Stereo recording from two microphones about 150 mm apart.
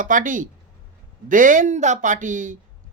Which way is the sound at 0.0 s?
60° right (ahead or behind).